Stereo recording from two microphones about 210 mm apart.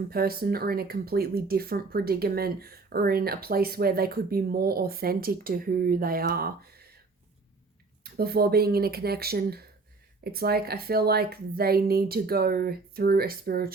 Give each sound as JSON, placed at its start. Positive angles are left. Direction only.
{"t": 0.1, "sound": "speech", "side_deg": -45}
{"t": 8.0, "sound": "speech", "side_deg": -45}